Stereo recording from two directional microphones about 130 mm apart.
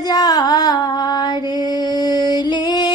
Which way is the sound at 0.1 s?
30° left (ahead or behind).